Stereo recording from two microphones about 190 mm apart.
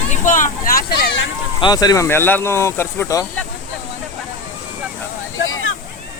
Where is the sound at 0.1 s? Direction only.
45° left (ahead or behind); by 1.3 s 65° left (ahead or behind).